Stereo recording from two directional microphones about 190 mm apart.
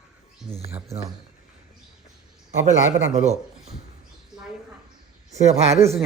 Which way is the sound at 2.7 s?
35° right (ahead or behind).